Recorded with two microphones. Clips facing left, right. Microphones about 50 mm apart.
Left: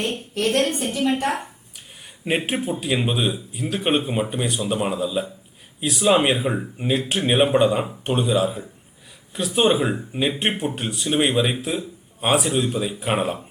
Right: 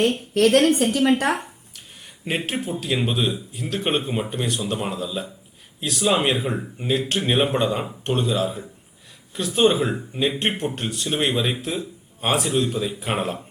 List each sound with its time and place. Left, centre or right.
0.3 s a woman's voice: right
0.8 s a woman's voice: right
2.2 s a man's voice: centre